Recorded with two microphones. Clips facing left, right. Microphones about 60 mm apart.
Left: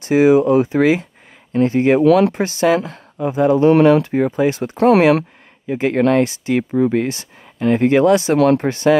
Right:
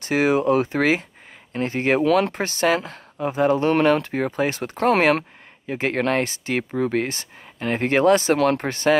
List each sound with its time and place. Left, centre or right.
0.0 s speech: right
4.4 s speech: right
7.1 s speech: right